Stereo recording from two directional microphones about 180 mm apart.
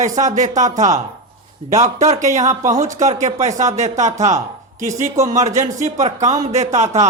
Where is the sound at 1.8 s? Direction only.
40° right (ahead or behind).